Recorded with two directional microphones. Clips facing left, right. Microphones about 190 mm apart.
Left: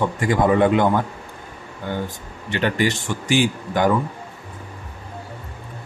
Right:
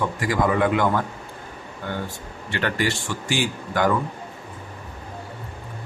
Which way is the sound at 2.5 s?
15° left (ahead or behind).